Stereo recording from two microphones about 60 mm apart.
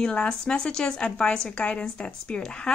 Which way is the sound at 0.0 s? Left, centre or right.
Centre.